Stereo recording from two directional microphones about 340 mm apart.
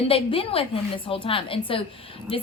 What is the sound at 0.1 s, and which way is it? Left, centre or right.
A woman's voice, centre.